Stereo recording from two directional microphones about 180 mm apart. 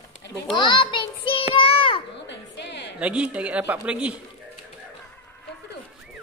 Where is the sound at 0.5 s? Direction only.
25° left (ahead or behind).